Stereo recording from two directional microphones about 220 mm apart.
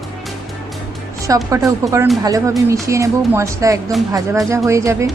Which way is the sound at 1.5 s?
15° right (ahead or behind).